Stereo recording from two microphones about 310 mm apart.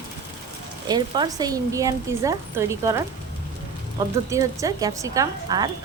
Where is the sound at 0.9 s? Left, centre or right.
Centre.